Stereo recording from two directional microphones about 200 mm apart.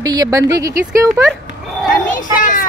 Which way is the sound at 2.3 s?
40° left (ahead or behind).